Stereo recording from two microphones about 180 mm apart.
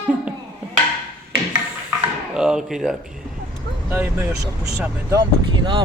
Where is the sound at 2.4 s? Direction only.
5° right (ahead or behind).